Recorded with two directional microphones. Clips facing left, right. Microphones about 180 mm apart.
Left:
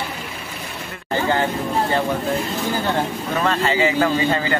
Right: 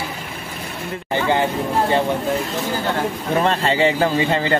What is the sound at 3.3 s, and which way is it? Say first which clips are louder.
A man's voice: right 1 dB; 30° right (ahead or behind).